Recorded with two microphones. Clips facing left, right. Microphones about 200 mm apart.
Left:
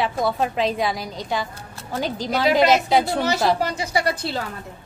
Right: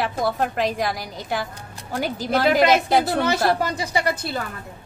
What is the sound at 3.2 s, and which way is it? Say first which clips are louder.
Speech: even; 55° right (ahead or behind).